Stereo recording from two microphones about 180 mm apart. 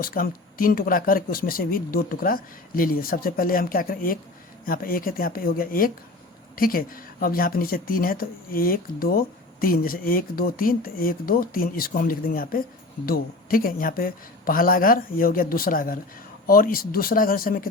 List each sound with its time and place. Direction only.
0.0 s speech: 50° left (ahead or behind)